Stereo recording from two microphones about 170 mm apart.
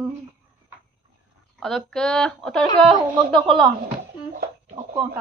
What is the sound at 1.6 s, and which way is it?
A woman's voice, centre (ahead or behind).